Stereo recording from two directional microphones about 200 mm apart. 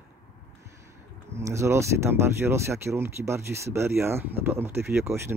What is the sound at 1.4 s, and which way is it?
Speech, 15° right (ahead or behind).